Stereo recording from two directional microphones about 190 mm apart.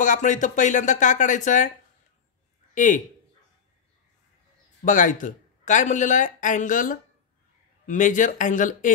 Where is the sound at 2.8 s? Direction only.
40° left (ahead or behind).